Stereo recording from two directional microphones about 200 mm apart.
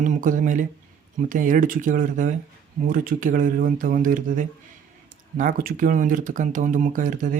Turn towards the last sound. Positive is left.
turn(degrees=-40)  # may be behind; listen again after turning